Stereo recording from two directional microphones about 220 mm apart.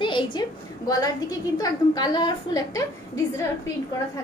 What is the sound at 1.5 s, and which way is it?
A woman's voice, 15° left (ahead or behind).